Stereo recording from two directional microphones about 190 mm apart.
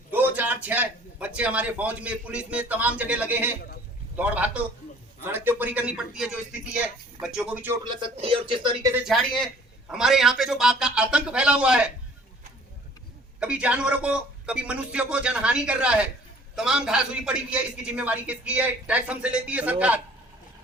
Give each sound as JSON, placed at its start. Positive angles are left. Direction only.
{"t": 0.1, "sound": "a man's voice", "side_deg": -10}
{"t": 7.9, "sound": "speech", "side_deg": -30}
{"t": 9.0, "sound": "speech", "side_deg": 0}
{"t": 13.4, "sound": "a man's voice", "side_deg": -5}